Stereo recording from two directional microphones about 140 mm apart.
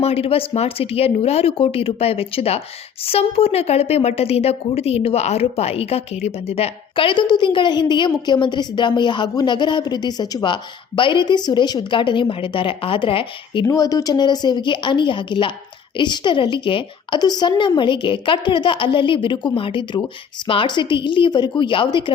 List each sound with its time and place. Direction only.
0.0 s a woman's voice: 45° left (ahead or behind)
13.7 s a woman's voice: 25° left (ahead or behind)